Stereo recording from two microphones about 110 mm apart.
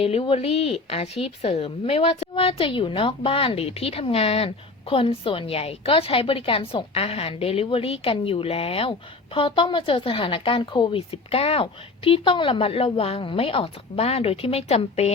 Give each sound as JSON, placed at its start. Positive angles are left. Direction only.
{"t": 0.0, "sound": "speech", "side_deg": 60}
{"t": 11.1, "sound": "speech", "side_deg": 65}